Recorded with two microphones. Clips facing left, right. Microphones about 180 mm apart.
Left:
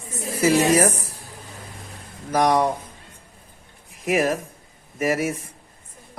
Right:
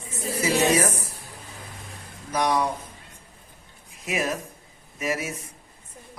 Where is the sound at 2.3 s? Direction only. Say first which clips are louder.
Left 5 dB; 55° left (ahead or behind).